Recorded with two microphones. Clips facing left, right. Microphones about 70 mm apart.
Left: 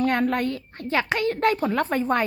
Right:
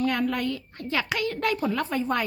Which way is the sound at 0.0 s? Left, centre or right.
Left.